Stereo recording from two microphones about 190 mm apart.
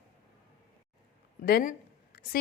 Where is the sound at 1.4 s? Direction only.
50° left (ahead or behind).